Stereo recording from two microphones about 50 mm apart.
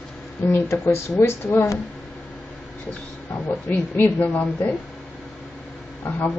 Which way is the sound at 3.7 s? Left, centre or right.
Left.